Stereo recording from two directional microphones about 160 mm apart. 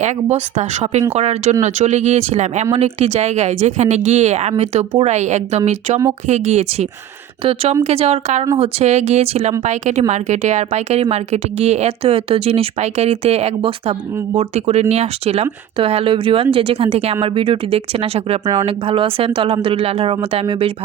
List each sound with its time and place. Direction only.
0.0 s speech: 45° right (ahead or behind)